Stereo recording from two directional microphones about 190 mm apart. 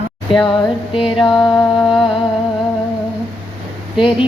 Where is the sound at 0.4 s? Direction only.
25° left (ahead or behind).